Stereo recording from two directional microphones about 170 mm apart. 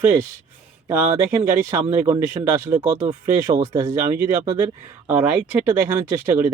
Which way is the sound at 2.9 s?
30° right (ahead or behind).